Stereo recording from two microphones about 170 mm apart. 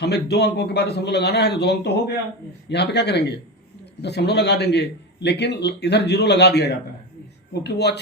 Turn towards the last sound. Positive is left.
turn(degrees=80)